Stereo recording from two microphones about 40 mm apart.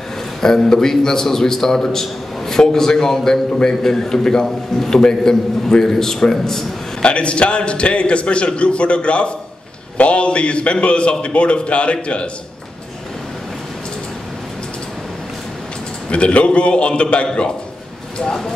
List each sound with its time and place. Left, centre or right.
0.4 s a man's voice: centre
7.0 s a man's voice: left
16.1 s a man's voice: left
18.2 s a man's voice: centre